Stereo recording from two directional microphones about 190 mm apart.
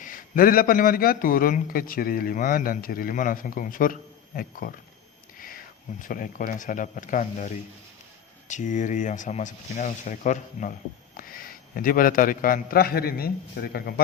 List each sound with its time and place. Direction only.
0.0 s a man's voice: 45° left (ahead or behind)
6.0 s a man's voice: 45° left (ahead or behind)